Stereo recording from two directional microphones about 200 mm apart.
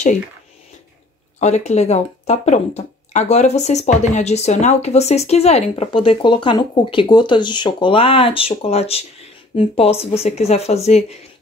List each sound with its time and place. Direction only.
1.4 s speech: 35° left (ahead or behind)